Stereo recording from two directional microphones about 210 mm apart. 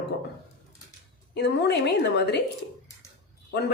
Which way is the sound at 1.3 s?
50° left (ahead or behind).